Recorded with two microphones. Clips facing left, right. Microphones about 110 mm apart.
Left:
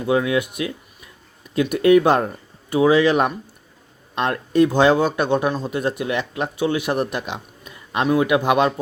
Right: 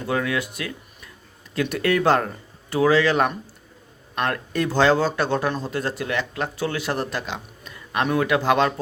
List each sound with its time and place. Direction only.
0.0 s a man's voice: 20° left (ahead or behind)